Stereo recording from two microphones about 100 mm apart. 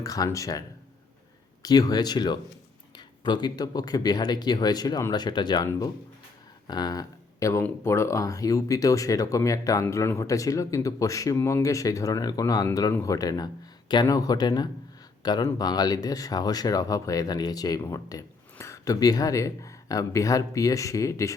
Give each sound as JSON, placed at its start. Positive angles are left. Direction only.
{"t": 0.0, "sound": "speech", "side_deg": 35}
{"t": 1.6, "sound": "speech", "side_deg": 40}
{"t": 6.7, "sound": "speech", "side_deg": 45}
{"t": 18.5, "sound": "speech", "side_deg": 25}